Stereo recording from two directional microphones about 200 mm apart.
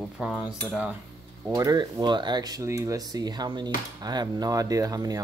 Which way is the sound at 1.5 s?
20° right (ahead or behind).